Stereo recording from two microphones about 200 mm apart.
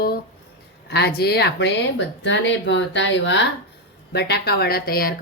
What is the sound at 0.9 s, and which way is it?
A woman's voice, 55° left (ahead or behind).